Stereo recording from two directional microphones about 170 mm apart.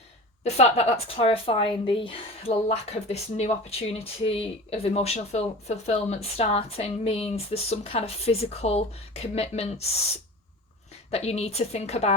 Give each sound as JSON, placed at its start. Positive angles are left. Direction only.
{"t": 0.4, "sound": "a woman's voice", "side_deg": 40}
{"t": 11.1, "sound": "a woman's voice", "side_deg": 40}